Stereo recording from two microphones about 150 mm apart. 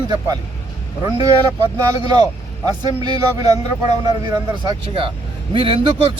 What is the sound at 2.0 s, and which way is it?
Speech, 25° right (ahead or behind).